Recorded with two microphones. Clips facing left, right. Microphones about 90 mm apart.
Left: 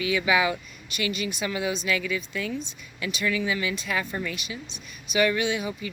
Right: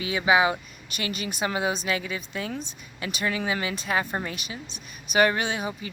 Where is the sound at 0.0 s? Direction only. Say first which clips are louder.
Right 2 dB; 30° right (ahead or behind).